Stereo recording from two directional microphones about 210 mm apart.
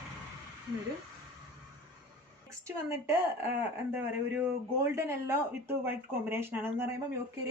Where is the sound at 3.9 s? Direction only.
10° right (ahead or behind).